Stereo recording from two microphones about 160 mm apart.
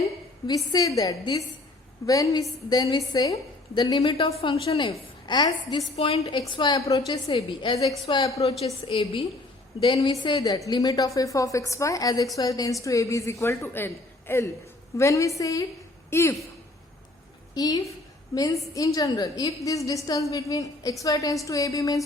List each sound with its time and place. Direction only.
0.4 s a woman's voice: 25° left (ahead or behind)
17.5 s a woman's voice: 25° left (ahead or behind)